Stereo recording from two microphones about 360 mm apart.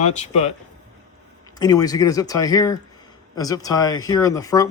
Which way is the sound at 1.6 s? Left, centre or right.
Centre.